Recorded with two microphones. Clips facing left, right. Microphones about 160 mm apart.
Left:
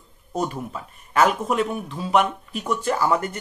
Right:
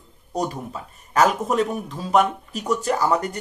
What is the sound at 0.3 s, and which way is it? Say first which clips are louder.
Speech: even; 35° right (ahead or behind).